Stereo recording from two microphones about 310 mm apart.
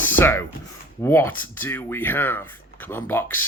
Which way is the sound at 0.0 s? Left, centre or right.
Centre.